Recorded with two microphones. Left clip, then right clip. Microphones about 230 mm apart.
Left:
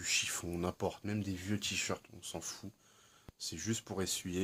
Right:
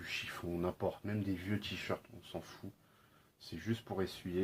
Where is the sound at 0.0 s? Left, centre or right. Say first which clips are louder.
Left 6 dB; left.